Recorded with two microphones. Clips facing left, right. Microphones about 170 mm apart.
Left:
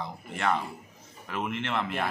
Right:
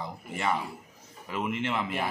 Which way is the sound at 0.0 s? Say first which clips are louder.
Left 1 dB; 5° right (ahead or behind).